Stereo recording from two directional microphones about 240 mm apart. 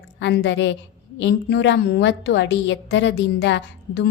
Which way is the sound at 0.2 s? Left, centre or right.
Left.